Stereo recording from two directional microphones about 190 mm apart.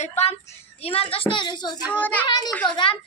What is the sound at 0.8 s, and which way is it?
A child's voice, 30° left (ahead or behind).